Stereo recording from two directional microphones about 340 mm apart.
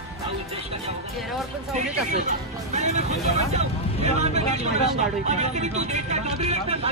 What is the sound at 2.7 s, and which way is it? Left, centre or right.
Speech, centre.